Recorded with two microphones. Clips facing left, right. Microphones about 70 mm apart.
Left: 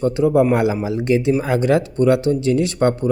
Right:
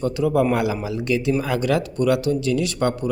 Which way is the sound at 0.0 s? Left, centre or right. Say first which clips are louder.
Left 4 dB; left.